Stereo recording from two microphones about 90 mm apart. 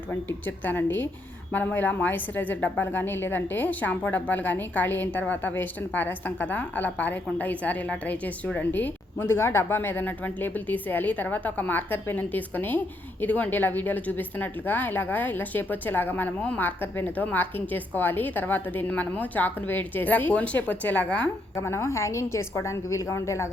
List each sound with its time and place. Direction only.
0.1 s a woman's voice: 20° left (ahead or behind)
21.5 s a woman's voice: 30° left (ahead or behind)